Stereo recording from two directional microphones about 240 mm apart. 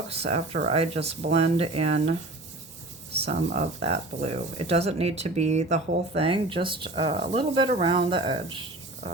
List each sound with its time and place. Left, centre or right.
0.1 s speech: right
3.2 s speech: right